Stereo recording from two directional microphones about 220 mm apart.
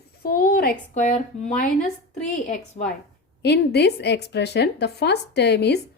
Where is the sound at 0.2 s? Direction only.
45° left (ahead or behind).